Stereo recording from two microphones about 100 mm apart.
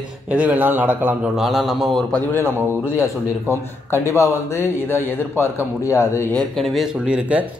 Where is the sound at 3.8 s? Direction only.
25° left (ahead or behind).